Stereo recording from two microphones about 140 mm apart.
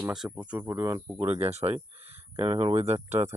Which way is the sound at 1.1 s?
45° right (ahead or behind).